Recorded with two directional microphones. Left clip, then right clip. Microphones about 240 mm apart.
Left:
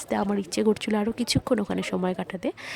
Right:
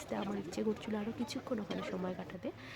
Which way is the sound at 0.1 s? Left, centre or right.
Left.